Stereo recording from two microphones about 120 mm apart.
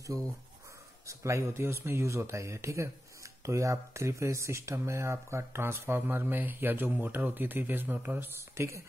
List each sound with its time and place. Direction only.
0.1 s speech: 30° right (ahead or behind)